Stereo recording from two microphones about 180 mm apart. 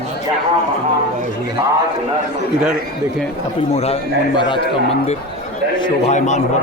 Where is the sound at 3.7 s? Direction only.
35° left (ahead or behind).